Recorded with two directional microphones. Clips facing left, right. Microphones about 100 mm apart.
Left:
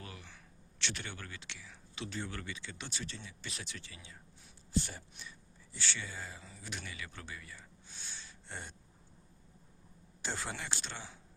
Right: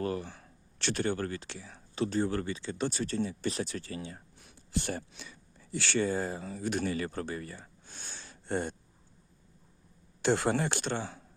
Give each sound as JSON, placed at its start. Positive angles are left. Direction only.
{"t": 0.0, "sound": "speech", "side_deg": -45}
{"t": 4.4, "sound": "speech", "side_deg": -65}
{"t": 10.2, "sound": "speech", "side_deg": -70}